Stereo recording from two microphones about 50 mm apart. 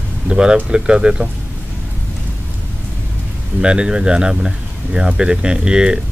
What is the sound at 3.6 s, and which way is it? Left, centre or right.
Speech, centre.